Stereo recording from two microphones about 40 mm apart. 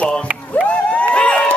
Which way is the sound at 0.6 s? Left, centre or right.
Left.